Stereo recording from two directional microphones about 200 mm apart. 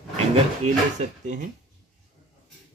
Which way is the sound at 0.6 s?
40° right (ahead or behind).